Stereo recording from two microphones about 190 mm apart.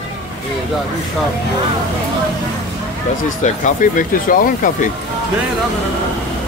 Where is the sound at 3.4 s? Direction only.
40° left (ahead or behind).